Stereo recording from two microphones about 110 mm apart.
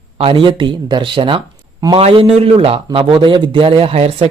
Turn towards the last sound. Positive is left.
turn(degrees=-55)  # may be behind; listen again after turning